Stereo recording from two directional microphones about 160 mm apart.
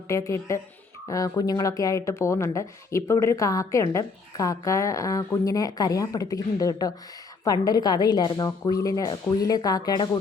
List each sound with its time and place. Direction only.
0.1 s speech: 20° left (ahead or behind)